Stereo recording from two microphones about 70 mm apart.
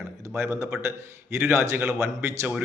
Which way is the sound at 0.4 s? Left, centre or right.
Right.